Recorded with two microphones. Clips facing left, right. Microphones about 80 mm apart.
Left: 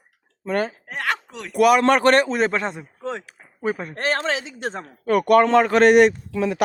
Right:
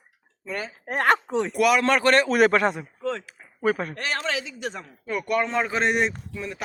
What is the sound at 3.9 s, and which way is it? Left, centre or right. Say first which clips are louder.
Speech: left 5 dB; left.